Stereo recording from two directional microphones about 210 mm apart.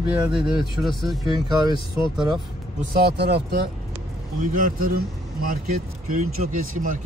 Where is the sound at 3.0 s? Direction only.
50° right (ahead or behind).